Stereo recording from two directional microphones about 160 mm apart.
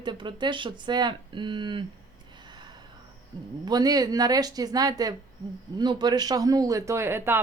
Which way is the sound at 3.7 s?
25° right (ahead or behind).